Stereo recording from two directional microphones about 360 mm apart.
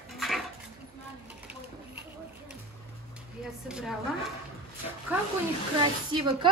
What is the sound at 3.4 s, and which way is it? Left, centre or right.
Speech, centre.